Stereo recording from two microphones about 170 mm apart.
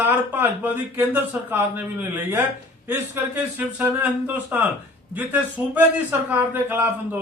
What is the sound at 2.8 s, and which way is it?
Speech, 10° right (ahead or behind).